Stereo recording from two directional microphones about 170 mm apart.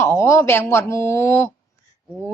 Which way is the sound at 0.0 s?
15° left (ahead or behind).